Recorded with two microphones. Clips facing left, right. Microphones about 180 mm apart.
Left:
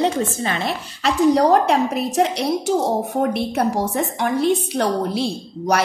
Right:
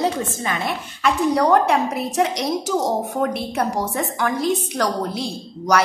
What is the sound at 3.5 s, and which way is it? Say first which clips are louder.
Speech: left 2 dB; 30° left (ahead or behind).